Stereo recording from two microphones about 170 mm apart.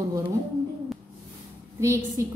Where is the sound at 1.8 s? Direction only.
15° right (ahead or behind).